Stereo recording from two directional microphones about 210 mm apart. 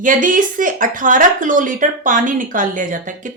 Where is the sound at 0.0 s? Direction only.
40° right (ahead or behind).